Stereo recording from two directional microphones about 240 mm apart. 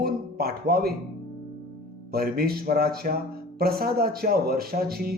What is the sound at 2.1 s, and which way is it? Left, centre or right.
Speech, right.